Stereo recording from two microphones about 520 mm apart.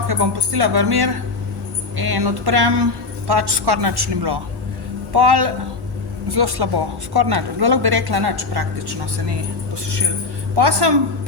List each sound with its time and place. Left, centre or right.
0.1 s a woman's voice: right
10.5 s a woman's voice: right